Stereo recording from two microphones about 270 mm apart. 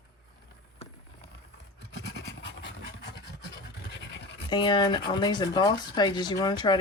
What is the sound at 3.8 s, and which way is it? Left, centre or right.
Scratch, left.